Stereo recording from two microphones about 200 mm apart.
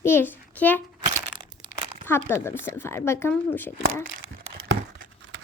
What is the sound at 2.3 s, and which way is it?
A woman's voice, 10° left (ahead or behind).